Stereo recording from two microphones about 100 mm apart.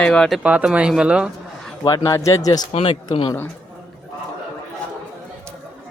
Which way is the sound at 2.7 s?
70° left (ahead or behind).